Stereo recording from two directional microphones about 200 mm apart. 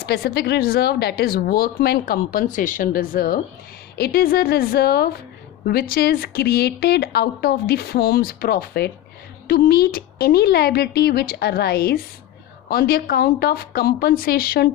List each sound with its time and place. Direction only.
0.0 s speech: 50° left (ahead or behind)